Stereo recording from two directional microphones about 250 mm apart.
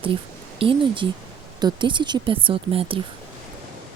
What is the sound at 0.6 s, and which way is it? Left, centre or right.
Speech, centre.